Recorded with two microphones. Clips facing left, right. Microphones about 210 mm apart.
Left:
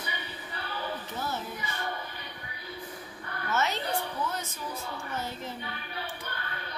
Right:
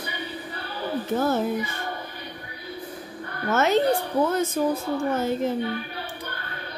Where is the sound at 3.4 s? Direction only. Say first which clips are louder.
Right 11 dB; 50° right (ahead or behind).